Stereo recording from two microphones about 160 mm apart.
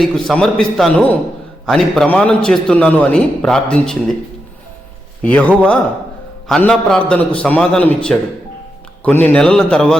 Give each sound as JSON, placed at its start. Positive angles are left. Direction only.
{"t": 0.0, "sound": "a man's voice", "side_deg": 5}
{"t": 5.2, "sound": "a man's voice", "side_deg": 10}